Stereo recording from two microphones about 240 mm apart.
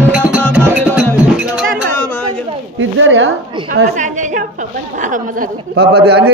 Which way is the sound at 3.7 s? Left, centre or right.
Right.